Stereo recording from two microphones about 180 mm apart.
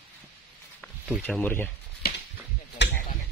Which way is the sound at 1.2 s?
10° left (ahead or behind).